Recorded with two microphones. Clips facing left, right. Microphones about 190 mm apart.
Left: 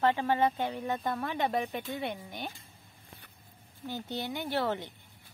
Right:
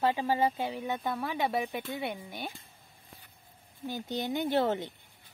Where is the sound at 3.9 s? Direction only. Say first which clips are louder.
Right 3 dB; 15° right (ahead or behind).